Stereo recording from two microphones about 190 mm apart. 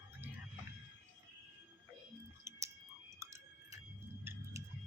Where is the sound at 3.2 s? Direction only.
15° right (ahead or behind).